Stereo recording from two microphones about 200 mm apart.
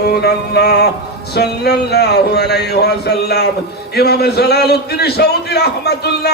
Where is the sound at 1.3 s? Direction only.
55° left (ahead or behind).